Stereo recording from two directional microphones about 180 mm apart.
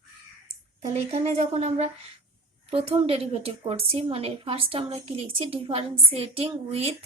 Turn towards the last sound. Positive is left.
turn(degrees=-35)  # may be behind; listen again after turning